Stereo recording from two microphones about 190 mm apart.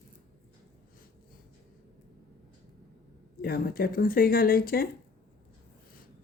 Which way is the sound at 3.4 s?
55° left (ahead or behind).